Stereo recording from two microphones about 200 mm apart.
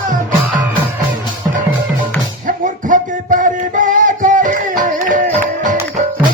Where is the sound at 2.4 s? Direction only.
40° right (ahead or behind).